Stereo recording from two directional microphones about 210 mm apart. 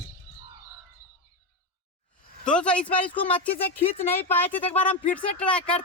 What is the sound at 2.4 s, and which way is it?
Speech, 5° left (ahead or behind).